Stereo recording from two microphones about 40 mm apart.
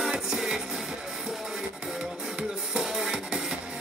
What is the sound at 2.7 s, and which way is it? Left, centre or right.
Music, centre.